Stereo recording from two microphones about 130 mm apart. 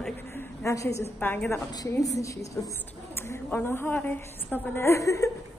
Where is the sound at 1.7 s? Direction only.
30° left (ahead or behind).